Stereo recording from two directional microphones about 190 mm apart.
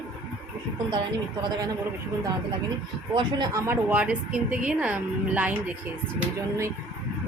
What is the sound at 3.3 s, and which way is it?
A woman's voice, 20° right (ahead or behind).